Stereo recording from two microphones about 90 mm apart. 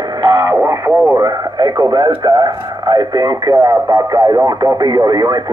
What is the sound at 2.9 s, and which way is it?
Speech, 55° right (ahead or behind).